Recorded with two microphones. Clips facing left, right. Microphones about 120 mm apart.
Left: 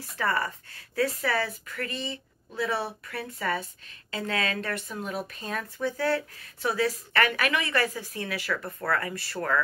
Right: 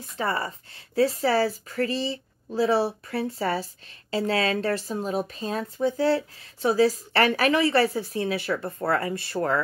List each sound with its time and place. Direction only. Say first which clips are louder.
0.2 s speech: right 1 dB; 25° right (ahead or behind)